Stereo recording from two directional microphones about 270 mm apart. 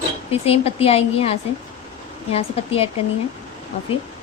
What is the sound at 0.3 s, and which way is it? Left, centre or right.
Speech, left.